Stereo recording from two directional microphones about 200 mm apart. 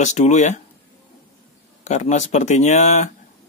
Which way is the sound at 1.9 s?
35° left (ahead or behind).